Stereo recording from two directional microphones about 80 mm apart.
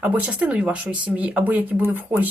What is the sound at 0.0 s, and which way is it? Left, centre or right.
Speech, centre.